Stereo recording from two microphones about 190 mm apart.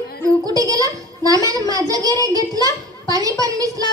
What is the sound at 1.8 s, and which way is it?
A child's voice, 20° right (ahead or behind).